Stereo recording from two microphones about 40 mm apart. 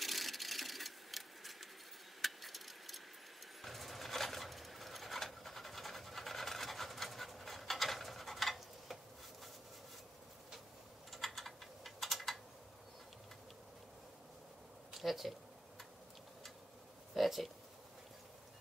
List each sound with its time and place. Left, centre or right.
0.0 s sewing machine: centre
2.2 s a sound: centre
3.6 s bird: centre
11.1 s typing: centre
15.0 s speech: centre
17.1 s a sound: centre